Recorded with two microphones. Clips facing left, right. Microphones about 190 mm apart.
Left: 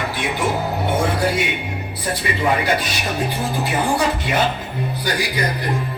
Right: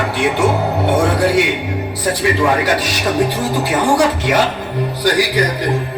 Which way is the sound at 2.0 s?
75° right (ahead or behind).